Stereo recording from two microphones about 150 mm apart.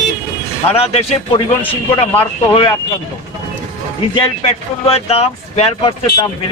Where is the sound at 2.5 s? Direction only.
35° left (ahead or behind).